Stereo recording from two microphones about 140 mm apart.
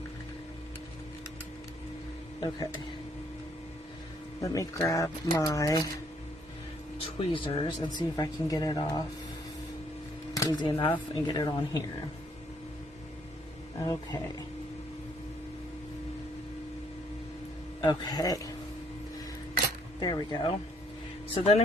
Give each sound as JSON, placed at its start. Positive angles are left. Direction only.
{"t": 4.4, "sound": "speech", "side_deg": 25}
{"t": 7.2, "sound": "speech", "side_deg": 40}
{"t": 10.3, "sound": "speech", "side_deg": 25}
{"t": 13.7, "sound": "speech", "side_deg": 25}
{"t": 17.7, "sound": "speech", "side_deg": 30}
{"t": 20.0, "sound": "speech", "side_deg": 30}
{"t": 21.3, "sound": "speech", "side_deg": 45}